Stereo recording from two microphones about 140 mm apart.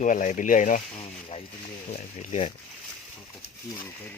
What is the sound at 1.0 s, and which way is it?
Speech, 45° left (ahead or behind).